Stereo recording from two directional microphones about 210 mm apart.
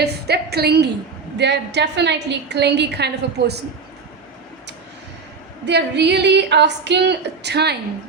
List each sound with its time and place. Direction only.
0.0 s a woman's voice: 50° right (ahead or behind)
5.6 s a woman's voice: 55° right (ahead or behind)